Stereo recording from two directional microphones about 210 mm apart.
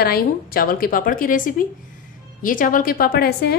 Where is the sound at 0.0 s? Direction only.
45° left (ahead or behind).